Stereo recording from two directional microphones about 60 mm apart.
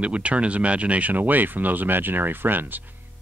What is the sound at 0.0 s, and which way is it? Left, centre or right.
Speech, right.